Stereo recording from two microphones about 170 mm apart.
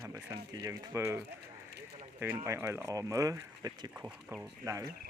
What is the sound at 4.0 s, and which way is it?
Speech, 5° right (ahead or behind).